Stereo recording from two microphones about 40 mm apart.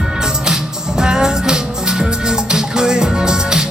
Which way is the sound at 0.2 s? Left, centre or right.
Centre.